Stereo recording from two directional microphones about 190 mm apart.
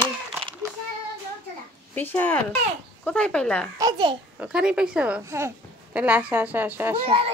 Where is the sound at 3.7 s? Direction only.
20° right (ahead or behind).